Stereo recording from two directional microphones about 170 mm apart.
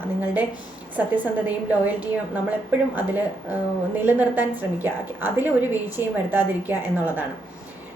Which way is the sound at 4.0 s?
10° right (ahead or behind).